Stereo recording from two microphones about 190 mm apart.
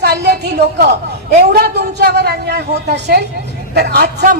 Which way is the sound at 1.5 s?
60° right (ahead or behind).